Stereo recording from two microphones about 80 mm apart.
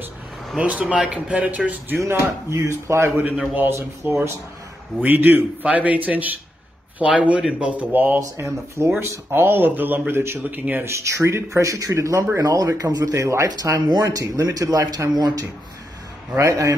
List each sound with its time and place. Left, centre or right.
0.6 s speech: centre
2.0 s speech: right
8.2 s speech: right
10.9 s speech: right
13.5 s speech: right